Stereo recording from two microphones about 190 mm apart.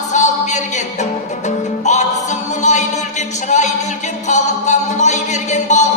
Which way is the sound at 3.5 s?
40° left (ahead or behind).